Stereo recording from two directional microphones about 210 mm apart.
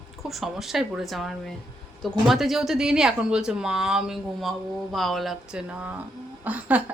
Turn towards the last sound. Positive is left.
turn(degrees=-5)  # may be behind; listen again after turning